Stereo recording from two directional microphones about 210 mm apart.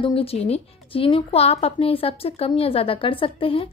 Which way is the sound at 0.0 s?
25° left (ahead or behind).